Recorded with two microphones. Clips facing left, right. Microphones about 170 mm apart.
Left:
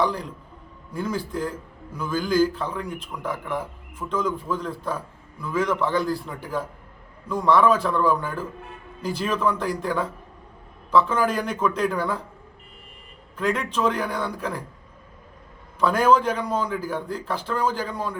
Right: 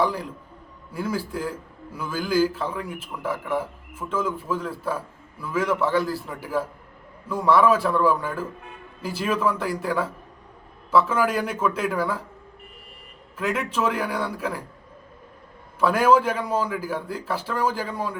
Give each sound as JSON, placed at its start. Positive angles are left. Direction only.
{"t": 0.0, "sound": "a man's voice", "side_deg": -5}
{"t": 13.3, "sound": "a man's voice", "side_deg": -5}
{"t": 15.8, "sound": "a man's voice", "side_deg": -10}